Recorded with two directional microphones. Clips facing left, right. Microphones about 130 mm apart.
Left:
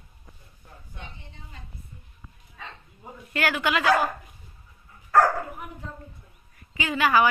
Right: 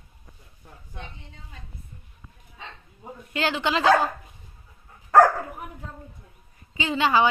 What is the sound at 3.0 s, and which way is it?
Speech, 20° right (ahead or behind).